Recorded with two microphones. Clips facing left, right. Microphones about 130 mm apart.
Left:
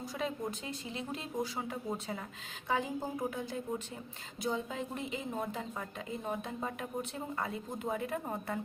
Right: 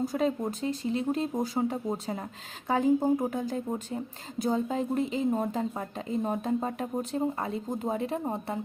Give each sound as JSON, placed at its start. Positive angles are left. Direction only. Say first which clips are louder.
{"t": 0.0, "sound": "speech", "louder": "right 9 dB", "side_deg": -45}